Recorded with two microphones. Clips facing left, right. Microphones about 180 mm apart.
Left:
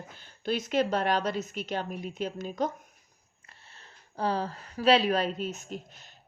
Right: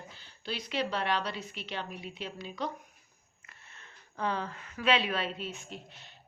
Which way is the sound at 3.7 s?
35° left (ahead or behind).